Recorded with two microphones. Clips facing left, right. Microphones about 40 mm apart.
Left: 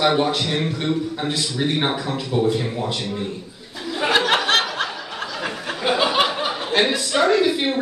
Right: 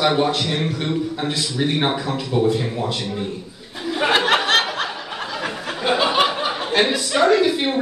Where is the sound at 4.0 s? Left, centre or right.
Right.